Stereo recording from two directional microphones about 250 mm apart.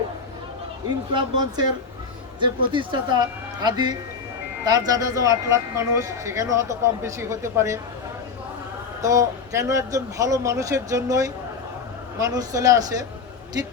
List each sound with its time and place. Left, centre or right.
1.1 s speech: centre
9.0 s speech: centre